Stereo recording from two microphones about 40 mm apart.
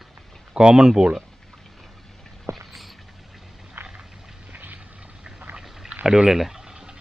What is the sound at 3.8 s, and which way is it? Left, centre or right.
Vehicle, right.